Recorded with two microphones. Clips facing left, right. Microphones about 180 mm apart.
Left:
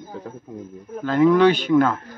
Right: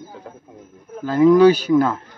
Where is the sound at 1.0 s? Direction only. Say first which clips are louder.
Right 3 dB; 10° right (ahead or behind).